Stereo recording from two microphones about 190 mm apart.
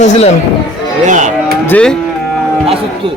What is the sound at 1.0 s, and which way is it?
Cattle, 40° right (ahead or behind).